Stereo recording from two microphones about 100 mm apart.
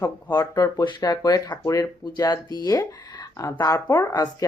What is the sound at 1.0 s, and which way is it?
Speech, 40° left (ahead or behind).